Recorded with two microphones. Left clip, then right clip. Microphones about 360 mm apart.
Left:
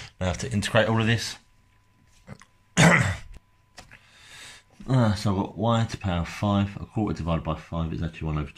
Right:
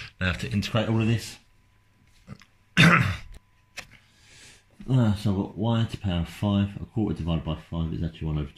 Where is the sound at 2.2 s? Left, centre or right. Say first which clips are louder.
Left 2 dB; centre.